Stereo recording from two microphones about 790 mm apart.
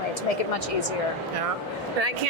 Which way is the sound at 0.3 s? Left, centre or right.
Left.